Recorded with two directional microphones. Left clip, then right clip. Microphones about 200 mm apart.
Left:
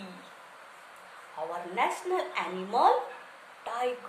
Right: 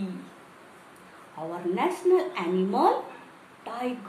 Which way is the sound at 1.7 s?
5° left (ahead or behind).